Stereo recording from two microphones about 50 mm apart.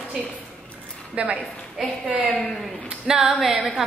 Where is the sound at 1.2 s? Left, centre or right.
Right.